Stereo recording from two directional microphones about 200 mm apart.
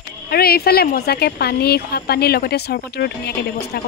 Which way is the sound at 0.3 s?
50° left (ahead or behind).